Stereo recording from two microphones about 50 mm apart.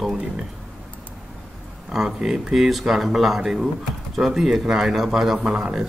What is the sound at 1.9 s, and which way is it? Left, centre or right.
A man's voice, centre.